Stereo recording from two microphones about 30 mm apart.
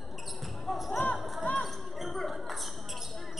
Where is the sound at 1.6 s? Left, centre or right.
Centre.